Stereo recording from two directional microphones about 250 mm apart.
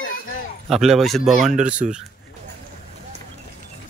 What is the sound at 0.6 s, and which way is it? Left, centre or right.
Speech, centre.